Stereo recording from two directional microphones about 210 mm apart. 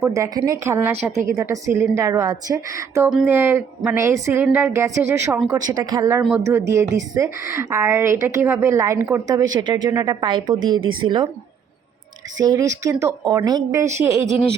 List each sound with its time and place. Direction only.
0.0 s a woman's voice: 15° right (ahead or behind)
12.4 s a woman's voice: 15° right (ahead or behind)